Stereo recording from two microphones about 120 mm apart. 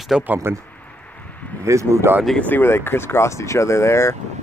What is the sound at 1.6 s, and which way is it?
Speech, 25° right (ahead or behind).